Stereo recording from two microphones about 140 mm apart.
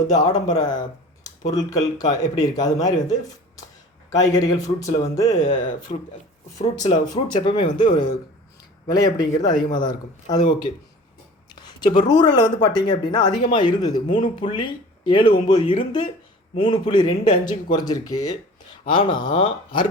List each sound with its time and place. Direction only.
0.1 s speech: 30° left (ahead or behind)
5.9 s speech: 40° left (ahead or behind)
6.6 s speech: 60° left (ahead or behind)
6.9 s speech: 30° left (ahead or behind)
11.5 s a sound: 30° left (ahead or behind)
11.9 s speech: 35° left (ahead or behind)